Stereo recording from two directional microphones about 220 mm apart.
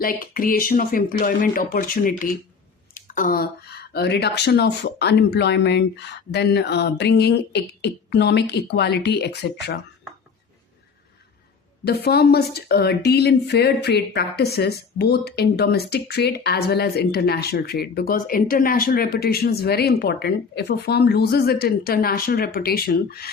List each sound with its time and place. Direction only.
0.0 s speech: 40° left (ahead or behind)
11.9 s speech: 45° left (ahead or behind)